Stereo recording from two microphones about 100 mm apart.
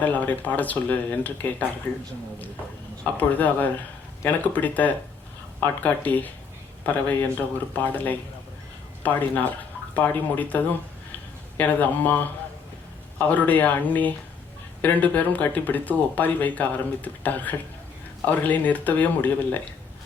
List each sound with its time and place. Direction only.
0.0 s speech: 15° left (ahead or behind)
3.0 s speech: 15° left (ahead or behind)
9.0 s speech: 15° left (ahead or behind)